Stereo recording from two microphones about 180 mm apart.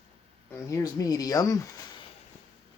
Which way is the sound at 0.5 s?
15° left (ahead or behind).